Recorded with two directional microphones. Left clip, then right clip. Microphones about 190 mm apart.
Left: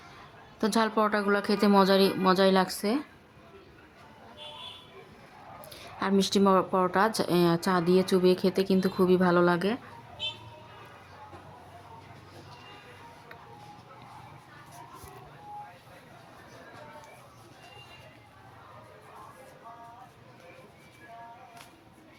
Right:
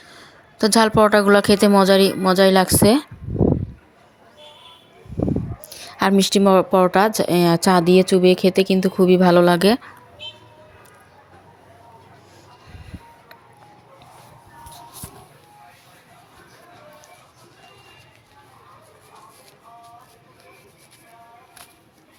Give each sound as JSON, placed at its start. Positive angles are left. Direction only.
{"t": 0.6, "sound": "speech", "side_deg": -30}
{"t": 6.1, "sound": "speech", "side_deg": -20}